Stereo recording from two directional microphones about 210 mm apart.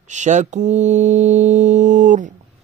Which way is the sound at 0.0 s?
35° right (ahead or behind).